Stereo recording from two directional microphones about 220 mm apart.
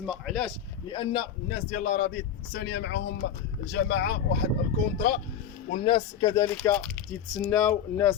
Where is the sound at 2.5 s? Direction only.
55° left (ahead or behind).